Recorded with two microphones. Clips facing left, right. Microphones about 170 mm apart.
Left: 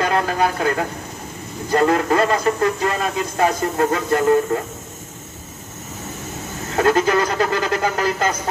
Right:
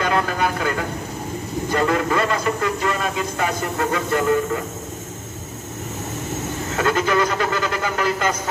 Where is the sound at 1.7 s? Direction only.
40° left (ahead or behind).